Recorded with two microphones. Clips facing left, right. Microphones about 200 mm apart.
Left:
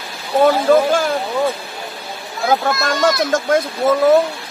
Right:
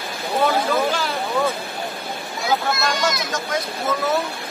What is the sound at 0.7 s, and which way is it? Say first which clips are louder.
Speech: left 8 dB; 50° left (ahead or behind).